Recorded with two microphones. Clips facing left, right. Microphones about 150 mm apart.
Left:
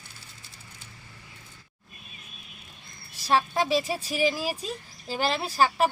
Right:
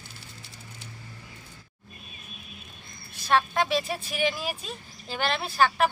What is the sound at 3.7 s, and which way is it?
Speech, 35° left (ahead or behind).